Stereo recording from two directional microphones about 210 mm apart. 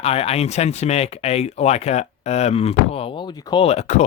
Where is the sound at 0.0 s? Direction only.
30° left (ahead or behind).